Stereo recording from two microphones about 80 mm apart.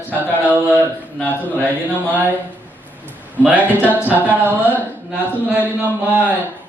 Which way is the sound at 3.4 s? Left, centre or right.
Right.